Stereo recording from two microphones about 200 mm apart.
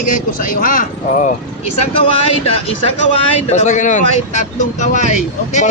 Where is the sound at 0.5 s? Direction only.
40° left (ahead or behind).